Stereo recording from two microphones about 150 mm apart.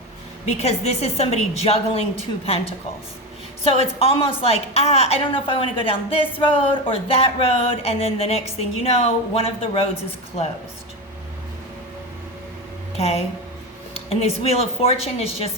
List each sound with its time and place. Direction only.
0.4 s a woman's voice: 45° left (ahead or behind)
3.6 s a woman's voice: 40° left (ahead or behind)
13.0 s a woman's voice: 45° left (ahead or behind)